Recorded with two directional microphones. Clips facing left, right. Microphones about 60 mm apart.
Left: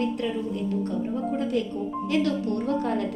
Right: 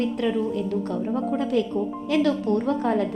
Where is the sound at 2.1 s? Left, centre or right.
Right.